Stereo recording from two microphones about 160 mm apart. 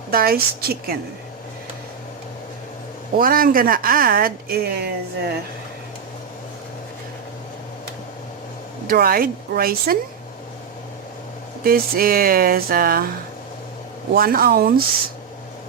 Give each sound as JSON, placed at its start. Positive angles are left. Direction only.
{"t": 0.1, "sound": "speech", "side_deg": -70}
{"t": 3.2, "sound": "speech", "side_deg": -65}
{"t": 8.9, "sound": "speech", "side_deg": -65}
{"t": 11.6, "sound": "speech", "side_deg": -65}
{"t": 14.1, "sound": "speech", "side_deg": -65}